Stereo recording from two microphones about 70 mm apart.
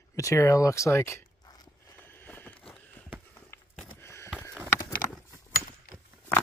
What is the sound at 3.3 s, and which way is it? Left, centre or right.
Walk, left.